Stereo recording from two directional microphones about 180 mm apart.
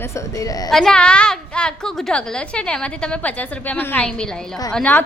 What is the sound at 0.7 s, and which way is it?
A woman's voice, 5° left (ahead or behind).